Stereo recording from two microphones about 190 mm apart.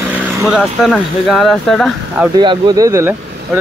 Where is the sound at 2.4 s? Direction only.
25° right (ahead or behind).